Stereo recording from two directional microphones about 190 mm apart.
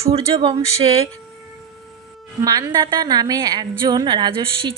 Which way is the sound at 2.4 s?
20° right (ahead or behind).